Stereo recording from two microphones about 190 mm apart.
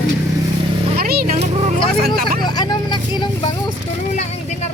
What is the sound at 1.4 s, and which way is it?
Vehicle, 35° right (ahead or behind).